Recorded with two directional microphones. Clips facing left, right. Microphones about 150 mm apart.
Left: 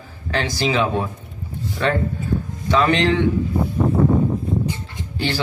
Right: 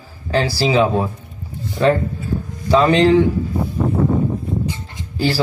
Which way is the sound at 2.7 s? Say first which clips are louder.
Right 5 dB; 35° right (ahead or behind).